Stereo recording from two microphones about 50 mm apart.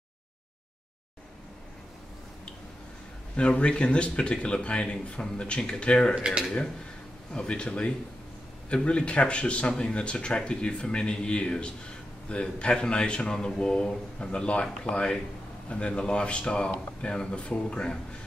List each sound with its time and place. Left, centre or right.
3.3 s a man's voice: left
7.3 s a man's voice: left